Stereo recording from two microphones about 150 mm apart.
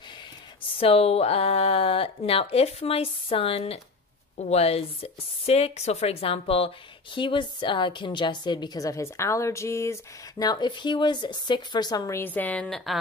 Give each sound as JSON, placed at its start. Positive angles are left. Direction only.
{"t": 0.7, "sound": "a woman's voice", "side_deg": 40}
{"t": 10.4, "sound": "speech", "side_deg": 30}
{"t": 12.2, "sound": "a woman's voice", "side_deg": 10}